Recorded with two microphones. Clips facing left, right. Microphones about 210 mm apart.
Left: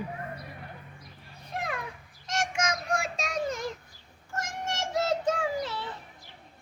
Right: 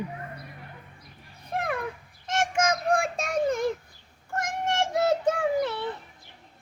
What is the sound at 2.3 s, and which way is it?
Child singing, 55° right (ahead or behind).